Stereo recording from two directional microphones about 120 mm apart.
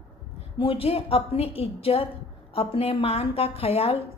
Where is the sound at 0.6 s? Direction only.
50° left (ahead or behind).